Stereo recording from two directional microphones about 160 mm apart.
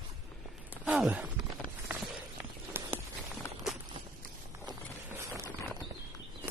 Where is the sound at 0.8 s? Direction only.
5° right (ahead or behind).